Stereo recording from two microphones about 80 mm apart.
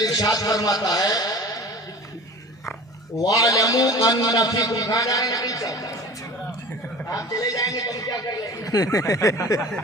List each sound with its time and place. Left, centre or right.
0.0 s a man's voice: left
3.2 s a man's voice: left
7.1 s a man's voice: left